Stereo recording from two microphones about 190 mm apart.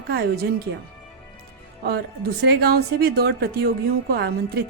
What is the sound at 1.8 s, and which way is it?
Speech, 55° right (ahead or behind).